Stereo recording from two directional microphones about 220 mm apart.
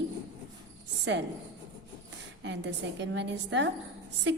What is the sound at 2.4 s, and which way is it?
A woman's voice, 50° right (ahead or behind).